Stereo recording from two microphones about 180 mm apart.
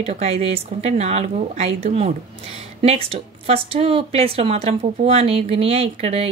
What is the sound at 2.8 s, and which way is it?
Speech, 35° right (ahead or behind).